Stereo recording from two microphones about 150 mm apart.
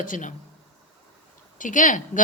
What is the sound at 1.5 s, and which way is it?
Speech, 60° left (ahead or behind).